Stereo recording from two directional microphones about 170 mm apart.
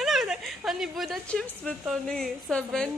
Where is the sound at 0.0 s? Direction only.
Centre (ahead or behind).